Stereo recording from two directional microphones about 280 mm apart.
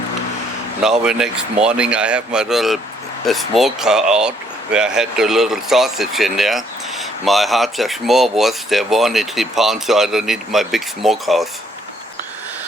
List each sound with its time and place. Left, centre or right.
0.8 s speech: centre